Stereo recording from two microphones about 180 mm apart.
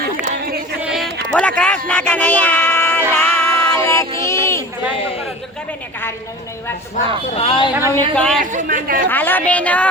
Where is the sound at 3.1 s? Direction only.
10° left (ahead or behind).